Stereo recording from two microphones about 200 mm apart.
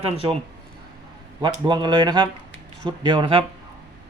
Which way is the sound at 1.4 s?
20° right (ahead or behind).